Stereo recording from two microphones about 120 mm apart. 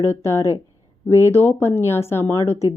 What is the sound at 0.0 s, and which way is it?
A woman's voice, 20° left (ahead or behind).